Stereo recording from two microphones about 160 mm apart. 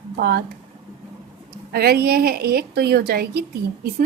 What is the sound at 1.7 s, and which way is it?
A woman's voice, 75° right (ahead or behind).